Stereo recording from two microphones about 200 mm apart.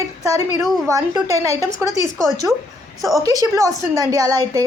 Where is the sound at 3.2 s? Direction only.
20° right (ahead or behind).